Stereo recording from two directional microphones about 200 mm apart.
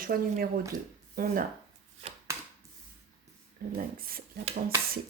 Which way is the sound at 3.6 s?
45° right (ahead or behind).